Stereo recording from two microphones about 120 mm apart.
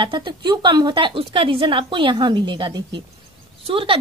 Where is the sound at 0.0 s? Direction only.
40° right (ahead or behind).